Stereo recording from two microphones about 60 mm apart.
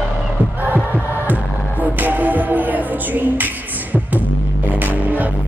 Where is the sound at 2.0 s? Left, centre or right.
Right.